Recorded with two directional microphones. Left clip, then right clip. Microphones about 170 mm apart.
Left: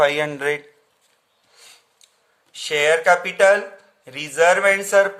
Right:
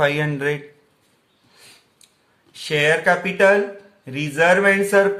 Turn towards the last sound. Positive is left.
turn(degrees=25)  # may be behind; listen again after turning